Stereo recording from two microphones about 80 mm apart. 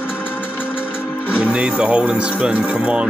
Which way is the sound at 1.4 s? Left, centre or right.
Centre.